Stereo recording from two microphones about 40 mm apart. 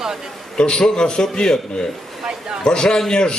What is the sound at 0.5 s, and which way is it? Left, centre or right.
A man's voice, left.